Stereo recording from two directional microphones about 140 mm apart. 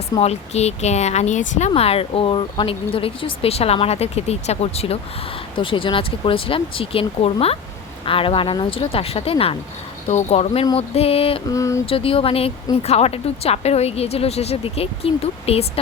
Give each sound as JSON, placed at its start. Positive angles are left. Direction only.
{"t": 0.2, "sound": "speech", "side_deg": 50}
{"t": 10.1, "sound": "speech", "side_deg": 55}
{"t": 11.4, "sound": "mantra", "side_deg": 20}
{"t": 11.9, "sound": "speech", "side_deg": 40}